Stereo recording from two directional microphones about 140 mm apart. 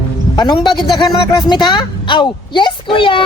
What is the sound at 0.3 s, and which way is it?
Speech, 30° left (ahead or behind).